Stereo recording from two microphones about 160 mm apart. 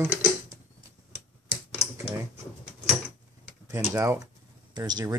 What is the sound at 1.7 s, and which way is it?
Typing, 20° right (ahead or behind).